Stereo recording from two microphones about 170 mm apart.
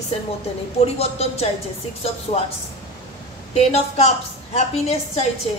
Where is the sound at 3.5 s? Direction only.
35° left (ahead or behind).